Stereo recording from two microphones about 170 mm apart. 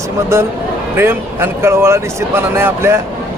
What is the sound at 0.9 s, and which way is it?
Speech, 15° right (ahead or behind).